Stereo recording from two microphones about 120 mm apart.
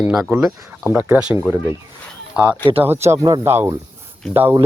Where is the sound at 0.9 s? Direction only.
15° right (ahead or behind).